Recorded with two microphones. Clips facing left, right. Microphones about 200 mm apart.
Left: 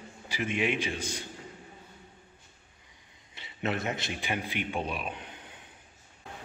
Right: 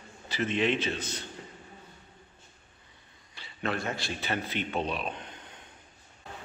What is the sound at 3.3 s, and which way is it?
A man's voice, 20° left (ahead or behind).